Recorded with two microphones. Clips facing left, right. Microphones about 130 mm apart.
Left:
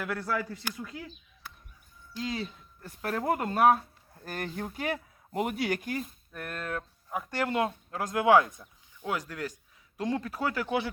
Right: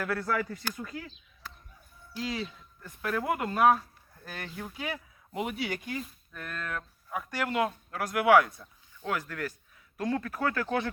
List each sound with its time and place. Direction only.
0.2 s speech: 5° left (ahead or behind)
2.1 s speech: 25° left (ahead or behind)
4.2 s speech: 45° left (ahead or behind)
6.6 s speech: 30° left (ahead or behind); by 10.9 s 10° left (ahead or behind)